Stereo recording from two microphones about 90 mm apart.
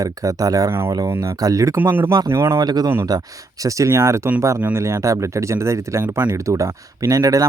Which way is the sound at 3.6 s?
35° right (ahead or behind).